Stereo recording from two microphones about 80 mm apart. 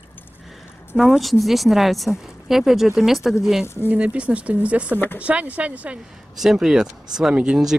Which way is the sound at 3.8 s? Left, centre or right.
Centre.